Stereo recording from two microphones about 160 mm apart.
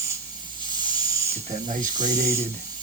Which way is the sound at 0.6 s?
25° right (ahead or behind).